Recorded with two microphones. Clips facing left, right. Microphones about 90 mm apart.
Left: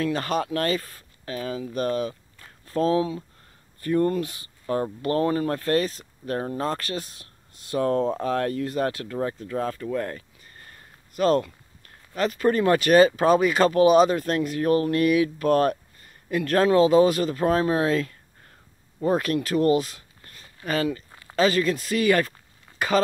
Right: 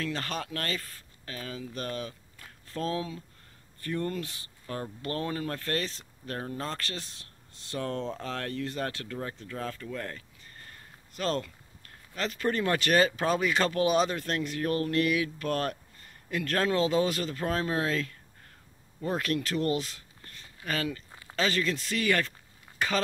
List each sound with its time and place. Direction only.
0.0 s speech: 15° left (ahead or behind)
1.8 s a sound: 15° left (ahead or behind)
2.8 s speech: 20° left (ahead or behind)
6.3 s speech: 35° left (ahead or behind)
6.6 s speech: 15° left (ahead or behind)
11.1 s speech: 15° left (ahead or behind)
19.1 s speech: 15° left (ahead or behind)